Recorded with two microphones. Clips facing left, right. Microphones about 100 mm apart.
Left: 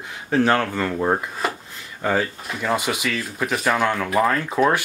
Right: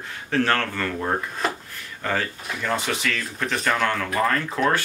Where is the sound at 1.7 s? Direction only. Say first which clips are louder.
Left 4 dB; 15° left (ahead or behind).